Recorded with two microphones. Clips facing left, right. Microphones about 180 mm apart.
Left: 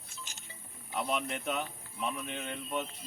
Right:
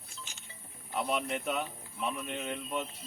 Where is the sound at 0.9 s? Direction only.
Centre (ahead or behind).